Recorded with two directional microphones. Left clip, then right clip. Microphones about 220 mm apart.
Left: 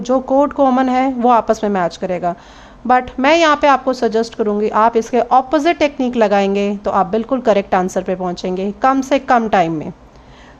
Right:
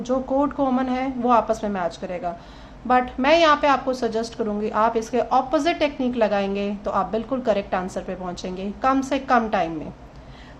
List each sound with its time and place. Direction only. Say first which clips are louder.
0.0 s a woman's voice: left 8 dB; 35° left (ahead or behind)